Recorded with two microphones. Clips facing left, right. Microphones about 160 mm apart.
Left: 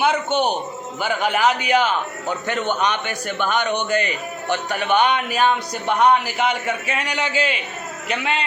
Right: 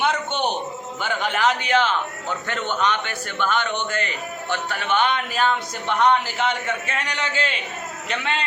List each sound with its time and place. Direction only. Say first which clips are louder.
0.0 s music: left 4 dB; 5° left (ahead or behind)
1.0 s a man's voice: left 3 dB; 10° left (ahead or behind)